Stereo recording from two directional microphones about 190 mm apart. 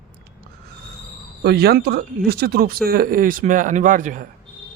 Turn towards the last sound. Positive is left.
turn(degrees=-45)  # may be behind; listen again after turning